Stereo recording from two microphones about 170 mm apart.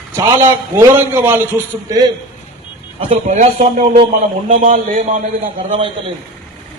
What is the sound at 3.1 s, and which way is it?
Speech, 45° right (ahead or behind).